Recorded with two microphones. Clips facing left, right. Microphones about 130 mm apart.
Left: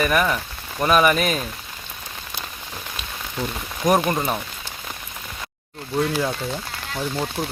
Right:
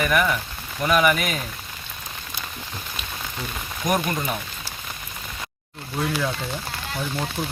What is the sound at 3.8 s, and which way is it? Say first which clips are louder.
Speech: left 5 dB; 35° left (ahead or behind).